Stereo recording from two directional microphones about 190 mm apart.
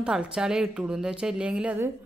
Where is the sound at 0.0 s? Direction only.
5° right (ahead or behind).